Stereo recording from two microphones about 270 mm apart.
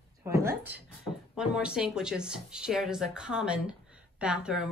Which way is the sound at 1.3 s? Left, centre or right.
Centre.